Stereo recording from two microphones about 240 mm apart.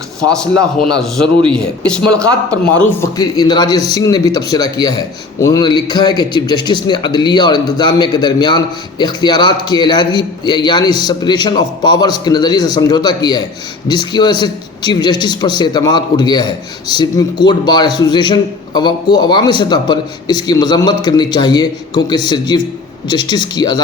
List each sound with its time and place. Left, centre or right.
0.9 s speech: centre
3.2 s a man's voice: centre